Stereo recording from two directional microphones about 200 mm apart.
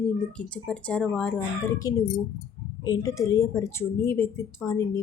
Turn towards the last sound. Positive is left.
turn(degrees=15)  # may be behind; listen again after turning